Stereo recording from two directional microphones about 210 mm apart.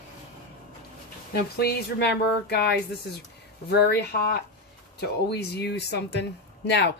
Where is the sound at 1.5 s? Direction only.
50° left (ahead or behind).